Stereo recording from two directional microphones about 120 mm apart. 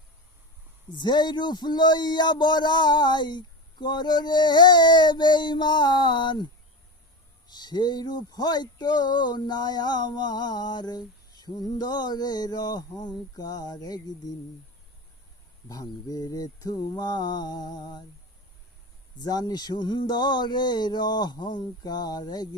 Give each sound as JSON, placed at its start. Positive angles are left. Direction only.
{"t": 0.9, "sound": "speech", "side_deg": 40}
{"t": 15.7, "sound": "speech", "side_deg": 30}
{"t": 19.2, "sound": "speech", "side_deg": 35}